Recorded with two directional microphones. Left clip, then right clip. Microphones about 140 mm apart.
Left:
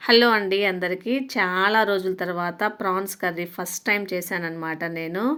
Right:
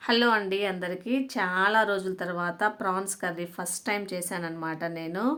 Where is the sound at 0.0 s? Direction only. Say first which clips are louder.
Left 6 dB; 25° left (ahead or behind).